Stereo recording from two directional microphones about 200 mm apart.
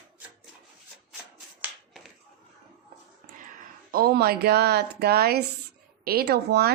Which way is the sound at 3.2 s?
50° right (ahead or behind).